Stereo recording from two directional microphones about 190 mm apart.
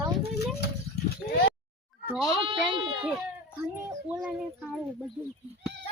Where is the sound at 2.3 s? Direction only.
25° right (ahead or behind).